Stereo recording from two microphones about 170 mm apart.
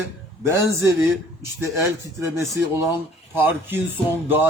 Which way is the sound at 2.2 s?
15° right (ahead or behind).